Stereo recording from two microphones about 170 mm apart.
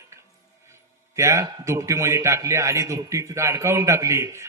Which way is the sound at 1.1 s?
15° right (ahead or behind).